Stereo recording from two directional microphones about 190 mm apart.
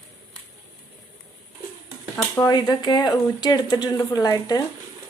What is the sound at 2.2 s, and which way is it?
Speech, 15° left (ahead or behind).